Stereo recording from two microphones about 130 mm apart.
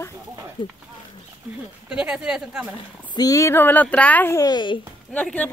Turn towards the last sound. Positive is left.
turn(degrees=10)  # may be behind; listen again after turning